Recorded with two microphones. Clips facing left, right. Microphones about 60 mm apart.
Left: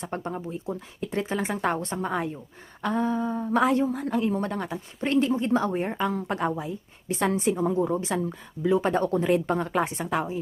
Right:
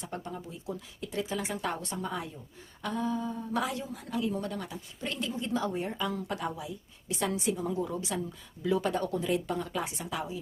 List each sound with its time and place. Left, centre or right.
0.0 s a woman's voice: left
7.9 s a woman's voice: left